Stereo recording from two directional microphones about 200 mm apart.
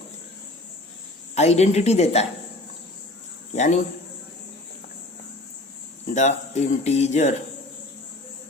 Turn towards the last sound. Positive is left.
turn(degrees=35)  # may be behind; listen again after turning